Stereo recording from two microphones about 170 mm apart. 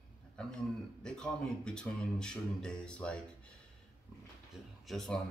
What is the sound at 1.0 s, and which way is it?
Speech, 5° left (ahead or behind).